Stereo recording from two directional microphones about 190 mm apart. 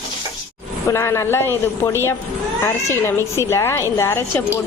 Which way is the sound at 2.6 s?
15° left (ahead or behind).